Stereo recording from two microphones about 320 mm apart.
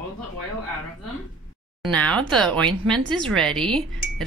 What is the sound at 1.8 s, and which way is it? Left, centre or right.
Speech, centre.